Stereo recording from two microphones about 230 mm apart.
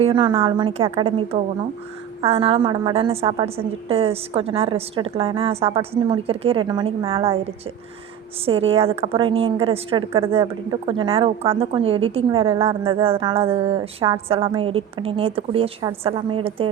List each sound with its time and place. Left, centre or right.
0.0 s a woman's voice: right
8.4 s a woman's voice: right